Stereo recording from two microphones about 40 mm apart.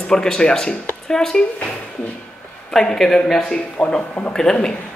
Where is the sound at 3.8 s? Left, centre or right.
Centre.